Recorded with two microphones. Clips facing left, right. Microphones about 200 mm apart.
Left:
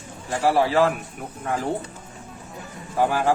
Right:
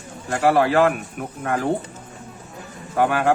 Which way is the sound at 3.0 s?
65° right (ahead or behind).